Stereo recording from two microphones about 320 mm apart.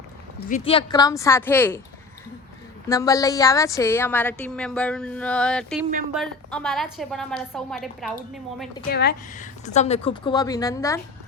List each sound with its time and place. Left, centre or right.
0.3 s a woman's voice: left
2.9 s a woman's voice: centre
8.9 s a woman's voice: left; by 11.0 s centre